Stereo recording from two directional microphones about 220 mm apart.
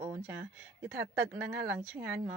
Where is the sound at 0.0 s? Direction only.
5° right (ahead or behind).